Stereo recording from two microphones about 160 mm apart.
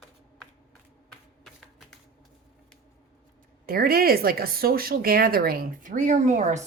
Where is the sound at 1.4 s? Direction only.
Centre (ahead or behind).